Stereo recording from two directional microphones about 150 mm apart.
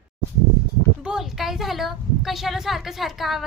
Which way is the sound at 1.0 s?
5° right (ahead or behind).